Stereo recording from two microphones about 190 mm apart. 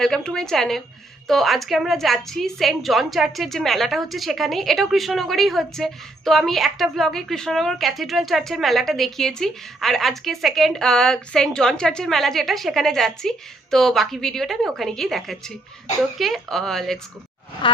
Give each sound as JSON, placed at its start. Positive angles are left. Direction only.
{"t": 0.0, "sound": "a woman's voice", "side_deg": 5}
{"t": 17.6, "sound": "speech", "side_deg": 25}